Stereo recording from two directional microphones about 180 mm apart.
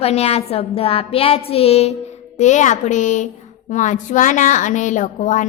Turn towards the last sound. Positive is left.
turn(degrees=45)  # may be behind; listen again after turning